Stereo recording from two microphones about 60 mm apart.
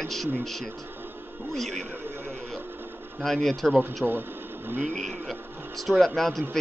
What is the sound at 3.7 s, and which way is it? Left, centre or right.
Speech, right.